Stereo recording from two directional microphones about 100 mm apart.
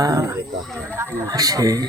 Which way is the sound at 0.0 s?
35° right (ahead or behind).